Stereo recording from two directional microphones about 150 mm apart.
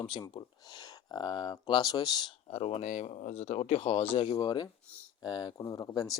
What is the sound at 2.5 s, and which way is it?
Speech, 40° left (ahead or behind).